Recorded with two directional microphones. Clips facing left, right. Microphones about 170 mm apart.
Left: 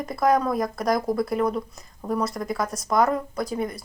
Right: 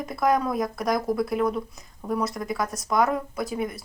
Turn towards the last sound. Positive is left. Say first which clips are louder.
# left 1 dB
turn(degrees=0)  # may be behind; listen again after turning